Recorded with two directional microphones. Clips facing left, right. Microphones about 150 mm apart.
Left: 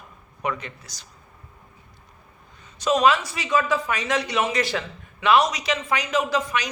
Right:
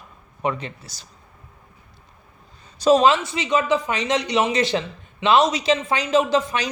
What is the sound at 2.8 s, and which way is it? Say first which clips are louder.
Speech: right 4 dB; 30° right (ahead or behind).